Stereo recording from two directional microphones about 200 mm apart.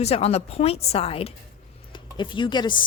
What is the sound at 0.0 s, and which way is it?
Speech, 30° left (ahead or behind).